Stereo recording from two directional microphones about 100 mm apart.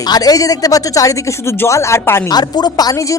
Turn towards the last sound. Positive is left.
turn(degrees=40)  # may be behind; listen again after turning